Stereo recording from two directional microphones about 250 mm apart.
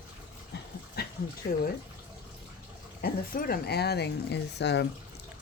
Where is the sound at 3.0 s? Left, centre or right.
Left.